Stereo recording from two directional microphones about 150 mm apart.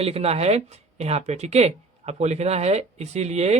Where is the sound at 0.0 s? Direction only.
45° right (ahead or behind).